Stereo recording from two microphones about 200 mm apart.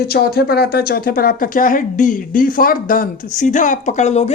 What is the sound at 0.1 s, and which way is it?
Speech, 50° left (ahead or behind).